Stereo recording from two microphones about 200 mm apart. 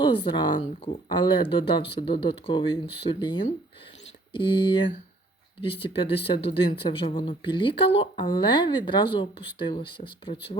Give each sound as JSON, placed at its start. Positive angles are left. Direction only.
{"t": 0.0, "sound": "speech", "side_deg": 25}